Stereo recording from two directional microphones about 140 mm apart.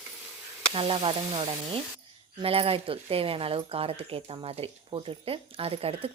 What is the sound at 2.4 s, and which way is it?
Speech, 45° right (ahead or behind).